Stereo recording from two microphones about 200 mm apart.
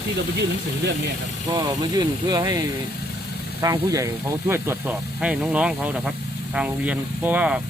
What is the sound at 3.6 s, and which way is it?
Speech, 15° right (ahead or behind).